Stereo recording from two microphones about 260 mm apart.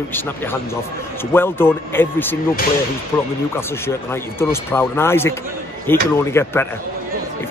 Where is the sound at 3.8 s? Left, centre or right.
Centre.